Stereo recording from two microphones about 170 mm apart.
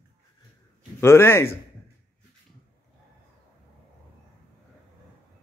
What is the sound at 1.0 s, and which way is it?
Speech, 15° left (ahead or behind).